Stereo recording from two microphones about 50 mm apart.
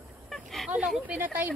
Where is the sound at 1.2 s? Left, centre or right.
Right.